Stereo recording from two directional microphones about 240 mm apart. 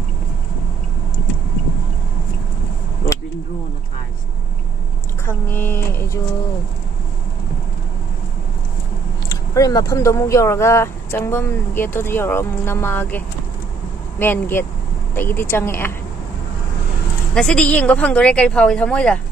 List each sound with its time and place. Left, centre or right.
5.2 s speech: centre
9.3 s speech: centre
17.3 s speech: centre